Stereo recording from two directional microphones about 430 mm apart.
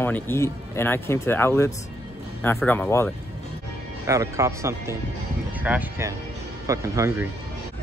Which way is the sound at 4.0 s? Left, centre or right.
Centre.